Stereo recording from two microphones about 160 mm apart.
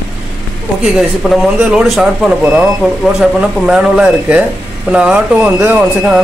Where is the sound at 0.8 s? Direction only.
Centre (ahead or behind).